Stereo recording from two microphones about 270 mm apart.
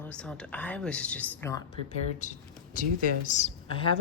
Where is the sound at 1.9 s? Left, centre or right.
Left.